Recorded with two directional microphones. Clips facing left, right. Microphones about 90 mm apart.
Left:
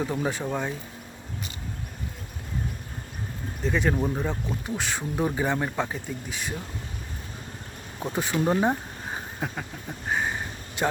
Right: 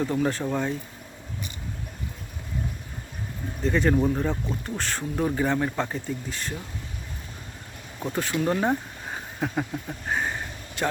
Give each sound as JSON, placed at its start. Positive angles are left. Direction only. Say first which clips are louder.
{"t": 0.0, "sound": "speech", "louder": "right 3 dB", "side_deg": 10}
{"t": 3.6, "sound": "speech", "louder": "right 3 dB", "side_deg": 5}
{"t": 7.9, "sound": "speech", "louder": "even", "side_deg": 15}
{"t": 8.4, "sound": "a sound", "louder": "left 1 dB", "side_deg": 15}
{"t": 10.8, "sound": "speech", "louder": "left 1 dB", "side_deg": 15}